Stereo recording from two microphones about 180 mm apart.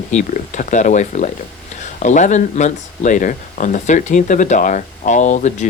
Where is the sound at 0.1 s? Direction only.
45° left (ahead or behind).